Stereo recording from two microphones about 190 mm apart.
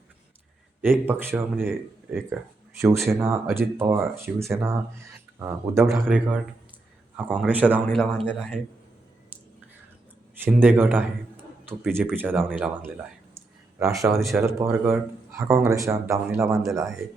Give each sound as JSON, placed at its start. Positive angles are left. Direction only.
{"t": 0.8, "sound": "speech", "side_deg": -10}
{"t": 2.8, "sound": "speech", "side_deg": -15}
{"t": 10.4, "sound": "speech", "side_deg": -10}
{"t": 14.1, "sound": "speech", "side_deg": 0}
{"t": 14.7, "sound": "speech", "side_deg": -10}